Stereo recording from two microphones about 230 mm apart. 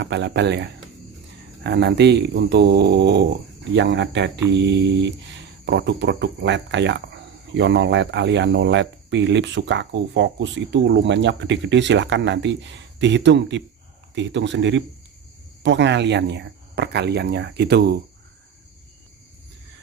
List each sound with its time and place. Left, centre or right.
0.0 s speech: right